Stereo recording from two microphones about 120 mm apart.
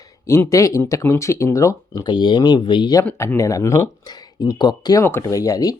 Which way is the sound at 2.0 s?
40° left (ahead or behind).